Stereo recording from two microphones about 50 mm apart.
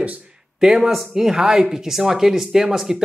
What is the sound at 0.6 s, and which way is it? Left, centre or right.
Speech, centre.